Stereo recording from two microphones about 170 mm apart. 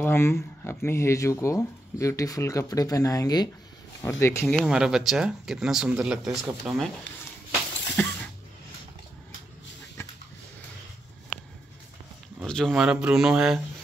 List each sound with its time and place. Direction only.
0.0 s speech: 15° left (ahead or behind)
4.5 s speech: 5° right (ahead or behind)
8.0 s a sound: 10° left (ahead or behind)
12.4 s speech: 5° left (ahead or behind)